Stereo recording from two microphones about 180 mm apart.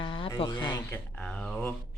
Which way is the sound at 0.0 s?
30° left (ahead or behind).